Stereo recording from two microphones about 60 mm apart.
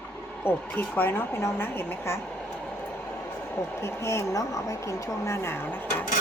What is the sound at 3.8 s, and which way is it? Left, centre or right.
A woman's voice, left.